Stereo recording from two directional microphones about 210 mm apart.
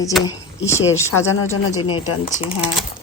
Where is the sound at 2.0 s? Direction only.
25° left (ahead or behind).